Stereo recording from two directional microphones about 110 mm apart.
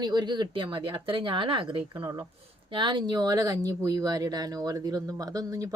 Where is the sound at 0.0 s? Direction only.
40° right (ahead or behind).